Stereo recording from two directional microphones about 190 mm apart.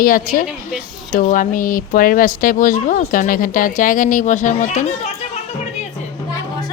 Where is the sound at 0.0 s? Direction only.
45° left (ahead or behind).